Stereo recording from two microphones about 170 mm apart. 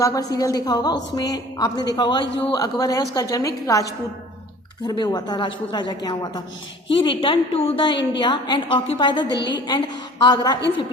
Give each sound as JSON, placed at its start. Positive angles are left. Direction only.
{"t": 0.0, "sound": "a woman's voice", "side_deg": 20}